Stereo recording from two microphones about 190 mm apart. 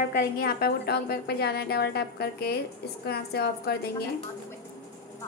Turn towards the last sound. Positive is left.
turn(degrees=60)  # may be behind; listen again after turning